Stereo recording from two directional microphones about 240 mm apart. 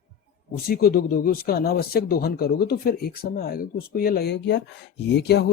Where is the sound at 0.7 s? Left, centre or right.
Left.